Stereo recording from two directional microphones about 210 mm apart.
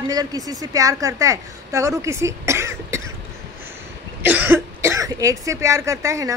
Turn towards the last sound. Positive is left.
turn(degrees=-15)  # may be behind; listen again after turning